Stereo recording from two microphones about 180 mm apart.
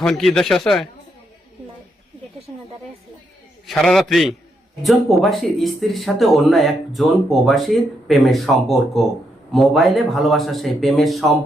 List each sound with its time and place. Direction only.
0.0 s speech: centre (ahead or behind)
2.5 s a sound: 20° right (ahead or behind)
3.7 s speech: centre (ahead or behind)